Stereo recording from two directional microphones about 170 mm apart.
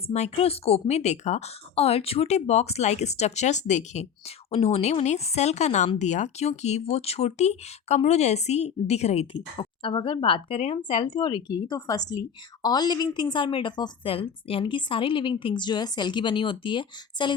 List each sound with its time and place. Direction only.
0.1 s speech: 35° left (ahead or behind)
9.6 s a woman's voice: 30° left (ahead or behind)